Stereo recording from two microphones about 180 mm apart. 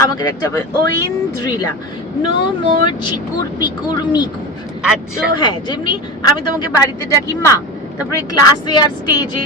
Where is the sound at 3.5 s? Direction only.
25° left (ahead or behind).